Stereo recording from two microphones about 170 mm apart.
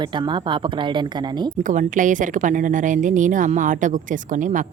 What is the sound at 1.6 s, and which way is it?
A woman's voice, 50° right (ahead or behind).